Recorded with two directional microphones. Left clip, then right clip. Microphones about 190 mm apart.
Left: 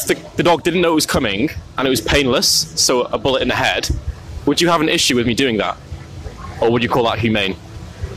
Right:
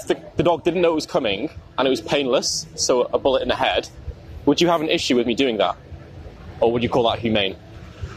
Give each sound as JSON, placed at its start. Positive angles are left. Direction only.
{"t": 0.1, "sound": "speech", "side_deg": 40}
{"t": 4.5, "sound": "a man's voice", "side_deg": 20}
{"t": 4.7, "sound": "speech", "side_deg": 35}